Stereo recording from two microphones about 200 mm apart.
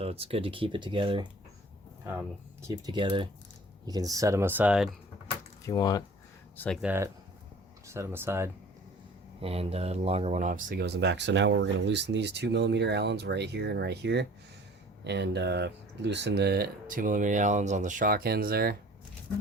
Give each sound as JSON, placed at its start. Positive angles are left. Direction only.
{"t": 0.0, "sound": "speech", "side_deg": -30}
{"t": 2.6, "sound": "speech", "side_deg": -15}
{"t": 5.6, "sound": "speech", "side_deg": 20}
{"t": 6.8, "sound": "speech", "side_deg": -10}
{"t": 9.4, "sound": "speech", "side_deg": -30}